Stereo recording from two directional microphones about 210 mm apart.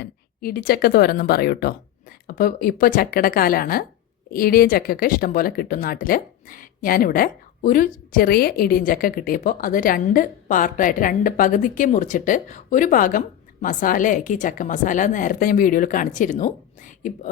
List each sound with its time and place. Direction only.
0.0 s a woman's voice: 45° left (ahead or behind)